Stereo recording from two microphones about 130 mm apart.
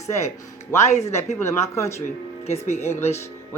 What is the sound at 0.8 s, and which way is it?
Speech, 60° left (ahead or behind).